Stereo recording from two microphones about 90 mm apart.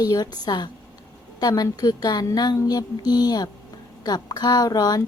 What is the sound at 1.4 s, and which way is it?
Speech, 45° left (ahead or behind).